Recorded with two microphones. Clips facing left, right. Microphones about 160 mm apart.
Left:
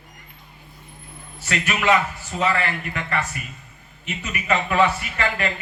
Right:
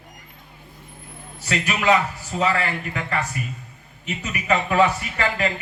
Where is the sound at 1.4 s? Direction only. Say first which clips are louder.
Right 1 dB; 35° right (ahead or behind).